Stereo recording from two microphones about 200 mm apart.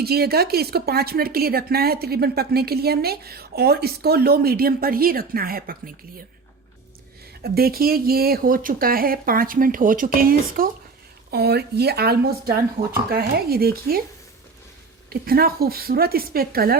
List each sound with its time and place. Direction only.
0.0 s speech: 50° right (ahead or behind)
7.4 s speech: 50° right (ahead or behind)
15.1 s speech: 50° right (ahead or behind)